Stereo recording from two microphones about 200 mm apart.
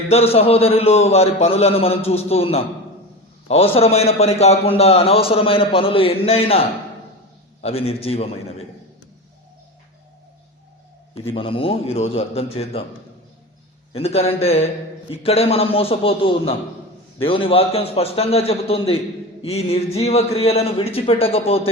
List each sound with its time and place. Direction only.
0.1 s a man's voice: 30° left (ahead or behind)
11.3 s a man's voice: 25° left (ahead or behind)
13.9 s a man's voice: 30° left (ahead or behind)